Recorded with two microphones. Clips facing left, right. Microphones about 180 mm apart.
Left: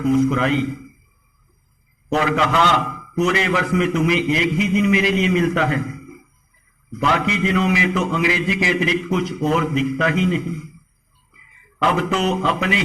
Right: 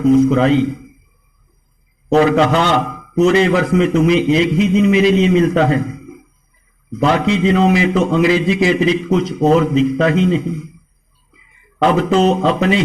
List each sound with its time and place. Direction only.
0.0 s a man's voice: 35° right (ahead or behind)
2.0 s a man's voice: 35° right (ahead or behind)